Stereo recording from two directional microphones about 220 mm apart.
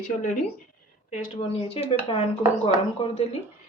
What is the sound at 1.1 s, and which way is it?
A woman's voice, 25° left (ahead or behind).